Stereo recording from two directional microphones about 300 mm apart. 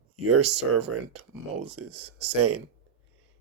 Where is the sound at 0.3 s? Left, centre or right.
Right.